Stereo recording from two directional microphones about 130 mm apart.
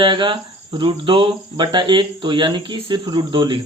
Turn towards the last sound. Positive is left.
turn(degrees=-35)  # may be behind; listen again after turning